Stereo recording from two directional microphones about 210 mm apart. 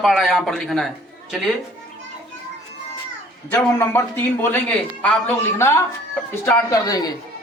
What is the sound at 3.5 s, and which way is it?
Speech, 10° left (ahead or behind).